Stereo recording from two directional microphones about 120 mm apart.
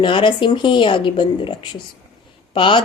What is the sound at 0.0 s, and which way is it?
A woman's voice, 45° left (ahead or behind).